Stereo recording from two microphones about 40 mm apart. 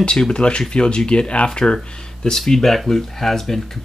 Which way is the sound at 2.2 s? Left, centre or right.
Centre.